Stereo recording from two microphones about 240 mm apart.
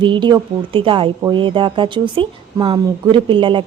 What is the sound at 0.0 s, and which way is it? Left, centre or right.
Speech, centre.